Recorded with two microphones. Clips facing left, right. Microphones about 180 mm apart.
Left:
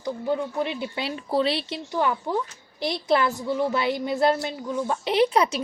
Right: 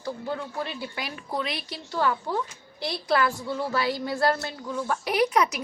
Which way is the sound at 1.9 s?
15° left (ahead or behind).